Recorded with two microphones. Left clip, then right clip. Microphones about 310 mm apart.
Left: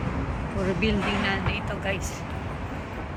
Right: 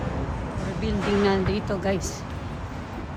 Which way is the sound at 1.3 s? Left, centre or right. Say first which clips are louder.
Right 3 dB; centre.